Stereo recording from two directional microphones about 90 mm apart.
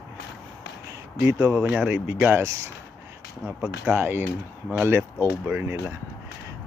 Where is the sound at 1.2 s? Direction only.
30° right (ahead or behind).